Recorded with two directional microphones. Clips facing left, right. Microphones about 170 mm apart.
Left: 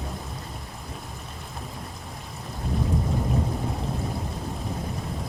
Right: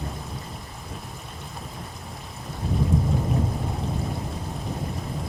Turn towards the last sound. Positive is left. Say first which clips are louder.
# right 1 dB
turn(degrees=0)  # may be behind; listen again after turning